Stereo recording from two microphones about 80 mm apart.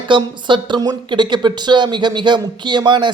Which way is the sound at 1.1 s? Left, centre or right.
Right.